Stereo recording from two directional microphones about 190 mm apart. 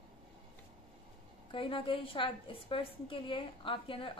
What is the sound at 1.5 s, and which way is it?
A woman's voice, 25° left (ahead or behind).